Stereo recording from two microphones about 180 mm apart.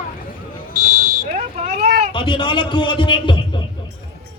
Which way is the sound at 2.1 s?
25° left (ahead or behind).